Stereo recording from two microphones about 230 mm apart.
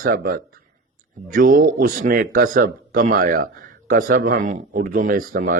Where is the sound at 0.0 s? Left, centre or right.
Right.